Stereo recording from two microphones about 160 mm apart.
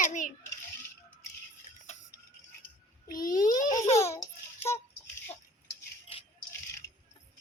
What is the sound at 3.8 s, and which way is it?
Speech, 40° left (ahead or behind).